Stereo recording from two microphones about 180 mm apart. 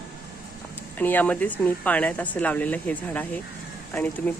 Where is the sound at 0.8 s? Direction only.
10° left (ahead or behind).